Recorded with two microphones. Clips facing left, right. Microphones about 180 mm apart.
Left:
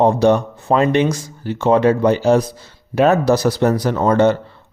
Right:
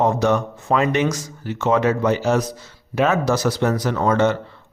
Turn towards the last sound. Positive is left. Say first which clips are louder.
# left 4 dB
turn(degrees=35)  # may be behind; listen again after turning